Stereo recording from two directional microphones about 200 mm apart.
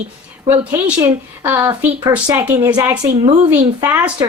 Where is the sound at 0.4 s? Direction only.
10° right (ahead or behind).